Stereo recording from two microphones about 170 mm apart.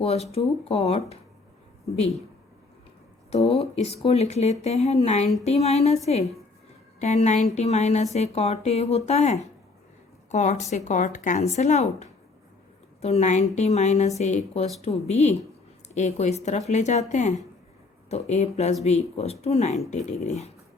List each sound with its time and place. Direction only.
0.0 s speech: 35° left (ahead or behind)
3.2 s speech: 35° left (ahead or behind)
7.0 s speech: 40° left (ahead or behind)